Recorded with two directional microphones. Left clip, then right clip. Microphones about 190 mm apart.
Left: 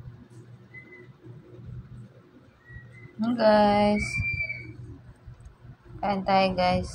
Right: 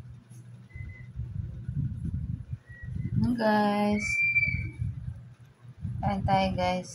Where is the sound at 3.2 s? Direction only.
10° left (ahead or behind).